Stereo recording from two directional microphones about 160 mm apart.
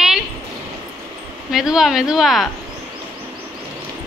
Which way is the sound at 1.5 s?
5° right (ahead or behind).